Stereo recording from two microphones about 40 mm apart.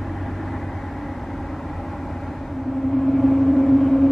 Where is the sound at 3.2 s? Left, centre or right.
Centre.